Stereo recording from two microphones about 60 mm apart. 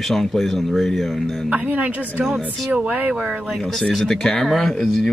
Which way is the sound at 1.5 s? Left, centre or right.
Right.